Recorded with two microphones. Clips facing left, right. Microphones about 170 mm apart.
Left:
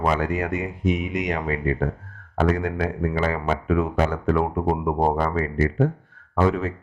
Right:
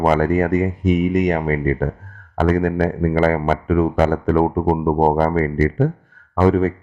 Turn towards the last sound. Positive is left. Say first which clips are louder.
# right 6 dB
turn(degrees=-40)  # may be behind; listen again after turning